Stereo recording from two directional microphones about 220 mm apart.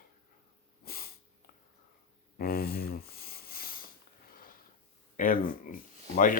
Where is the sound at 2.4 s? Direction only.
45° left (ahead or behind).